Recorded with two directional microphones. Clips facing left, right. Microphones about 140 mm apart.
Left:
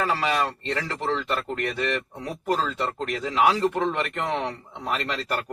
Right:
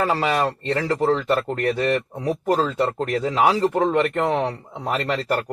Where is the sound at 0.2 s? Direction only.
40° right (ahead or behind).